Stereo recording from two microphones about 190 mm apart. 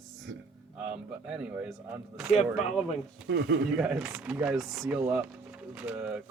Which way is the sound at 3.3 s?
65° right (ahead or behind).